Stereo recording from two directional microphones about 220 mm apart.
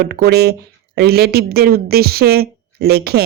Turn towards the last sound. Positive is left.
turn(degrees=-45)  # may be behind; listen again after turning